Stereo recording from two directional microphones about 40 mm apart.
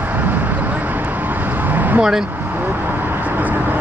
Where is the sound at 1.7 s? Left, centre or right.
Right.